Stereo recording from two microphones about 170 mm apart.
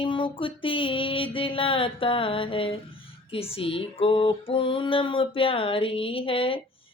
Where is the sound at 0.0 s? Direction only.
30° left (ahead or behind).